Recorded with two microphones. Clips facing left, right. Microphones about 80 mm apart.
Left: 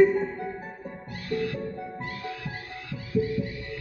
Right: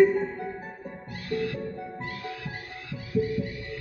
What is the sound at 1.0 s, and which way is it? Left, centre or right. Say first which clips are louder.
Music: even; centre.